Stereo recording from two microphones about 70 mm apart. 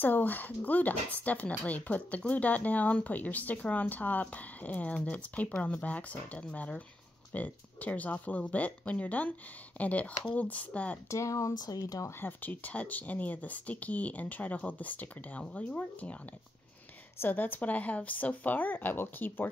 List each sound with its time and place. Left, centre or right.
0.0 s speech: left
11.1 s speech: left
11.5 s speech: left
12.1 s speech: left
17.2 s speech: left